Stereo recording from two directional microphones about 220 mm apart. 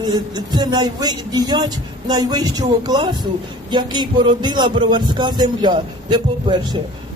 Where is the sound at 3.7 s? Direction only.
20° right (ahead or behind).